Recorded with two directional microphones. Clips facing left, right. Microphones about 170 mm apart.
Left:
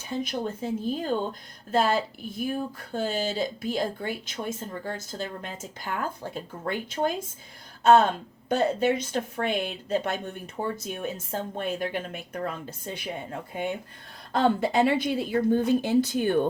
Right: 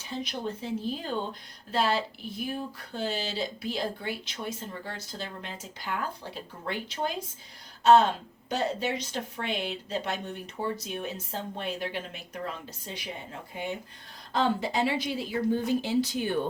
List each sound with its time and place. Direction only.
0.0 s speech: 50° left (ahead or behind)
14.3 s speech: 55° left (ahead or behind)